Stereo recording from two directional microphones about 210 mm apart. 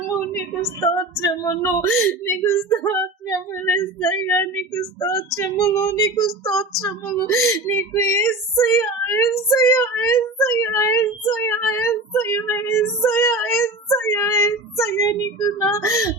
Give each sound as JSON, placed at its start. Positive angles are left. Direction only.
{"t": 0.3, "sound": "speech", "side_deg": 15}